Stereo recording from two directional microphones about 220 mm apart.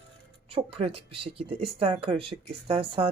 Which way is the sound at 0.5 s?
25° right (ahead or behind).